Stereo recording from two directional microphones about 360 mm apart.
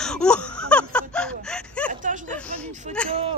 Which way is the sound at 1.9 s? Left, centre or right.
Right.